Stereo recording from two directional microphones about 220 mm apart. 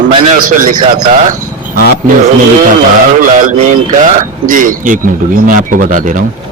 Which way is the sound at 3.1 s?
35° right (ahead or behind).